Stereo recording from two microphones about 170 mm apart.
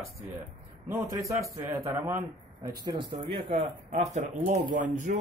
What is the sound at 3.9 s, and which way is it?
Speech, 45° right (ahead or behind).